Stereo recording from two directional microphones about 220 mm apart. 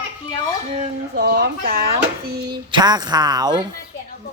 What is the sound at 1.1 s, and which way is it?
Speech, 45° right (ahead or behind).